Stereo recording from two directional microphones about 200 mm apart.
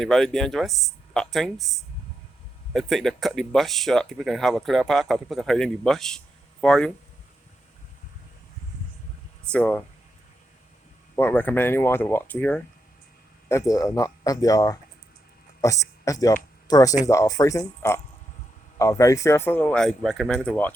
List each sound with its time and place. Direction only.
0.0 s speech: centre (ahead or behind)
9.5 s speech: 5° left (ahead or behind)
11.2 s speech: 10° left (ahead or behind)